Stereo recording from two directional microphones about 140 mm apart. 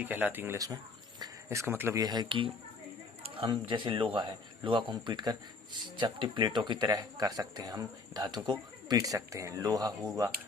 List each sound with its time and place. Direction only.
0.0 s speech: 15° right (ahead or behind)
1.2 s a sound: 20° right (ahead or behind)
2.0 s speech: 30° right (ahead or behind)